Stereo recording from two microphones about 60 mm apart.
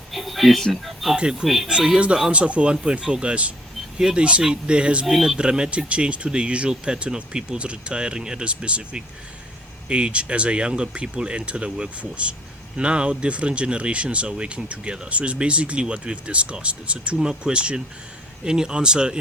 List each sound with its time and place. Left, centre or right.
0.1 s speech: centre
1.1 s speech: centre
5.0 s speech: centre